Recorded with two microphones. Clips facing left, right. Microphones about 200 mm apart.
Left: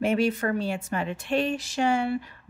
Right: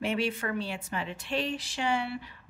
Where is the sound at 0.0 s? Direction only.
45° left (ahead or behind).